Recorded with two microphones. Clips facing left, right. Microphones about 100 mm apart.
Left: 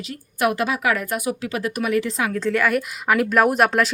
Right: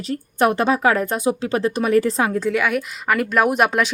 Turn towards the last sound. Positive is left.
turn(degrees=0)  # may be behind; listen again after turning